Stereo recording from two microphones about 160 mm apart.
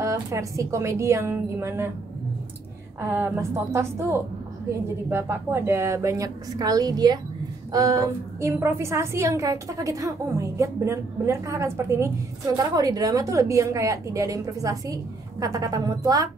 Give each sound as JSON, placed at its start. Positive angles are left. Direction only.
{"t": 0.0, "sound": "a woman's voice", "side_deg": -20}
{"t": 3.0, "sound": "a woman's voice", "side_deg": -15}